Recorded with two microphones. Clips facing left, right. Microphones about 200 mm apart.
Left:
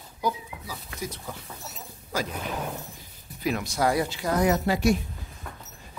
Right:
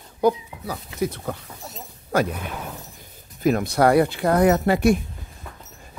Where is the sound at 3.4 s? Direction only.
55° right (ahead or behind).